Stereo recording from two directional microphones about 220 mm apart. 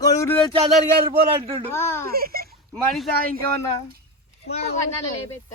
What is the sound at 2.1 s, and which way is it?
Speech, 45° right (ahead or behind).